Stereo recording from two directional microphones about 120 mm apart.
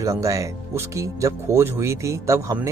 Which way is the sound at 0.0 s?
25° right (ahead or behind).